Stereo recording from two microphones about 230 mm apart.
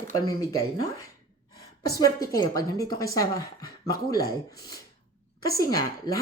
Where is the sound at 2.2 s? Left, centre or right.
Centre.